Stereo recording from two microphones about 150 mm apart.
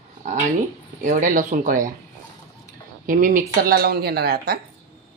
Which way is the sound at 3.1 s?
65° right (ahead or behind).